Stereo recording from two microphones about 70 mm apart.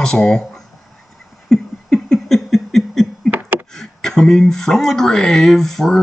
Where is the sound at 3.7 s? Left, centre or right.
Centre.